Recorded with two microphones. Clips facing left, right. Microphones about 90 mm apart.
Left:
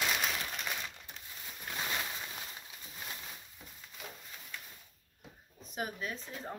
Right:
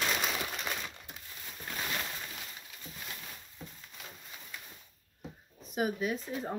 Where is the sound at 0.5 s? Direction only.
Centre (ahead or behind).